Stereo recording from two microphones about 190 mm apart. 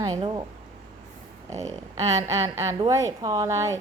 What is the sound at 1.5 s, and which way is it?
A woman's voice, 15° right (ahead or behind).